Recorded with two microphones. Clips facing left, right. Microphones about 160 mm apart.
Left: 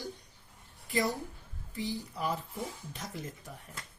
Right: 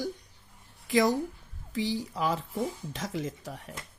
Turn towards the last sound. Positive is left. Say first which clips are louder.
# right 8 dB
turn(degrees=-90)